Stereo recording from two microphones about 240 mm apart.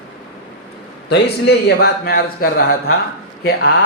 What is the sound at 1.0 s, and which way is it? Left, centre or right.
A man's voice, left.